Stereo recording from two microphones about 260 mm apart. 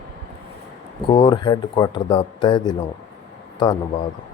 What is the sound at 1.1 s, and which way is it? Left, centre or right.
Speech, centre.